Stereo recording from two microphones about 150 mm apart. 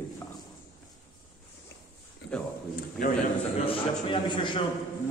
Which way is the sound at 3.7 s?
35° left (ahead or behind).